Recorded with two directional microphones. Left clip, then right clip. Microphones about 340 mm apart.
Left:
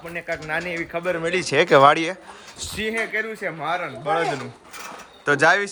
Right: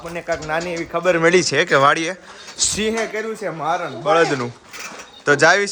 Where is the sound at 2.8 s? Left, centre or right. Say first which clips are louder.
Left 2 dB; centre.